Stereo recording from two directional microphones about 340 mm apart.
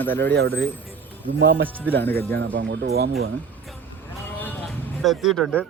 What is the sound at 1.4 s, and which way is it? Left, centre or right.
Speech, right.